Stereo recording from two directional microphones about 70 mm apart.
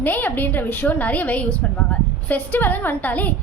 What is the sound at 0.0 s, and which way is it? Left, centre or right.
A woman's voice, left.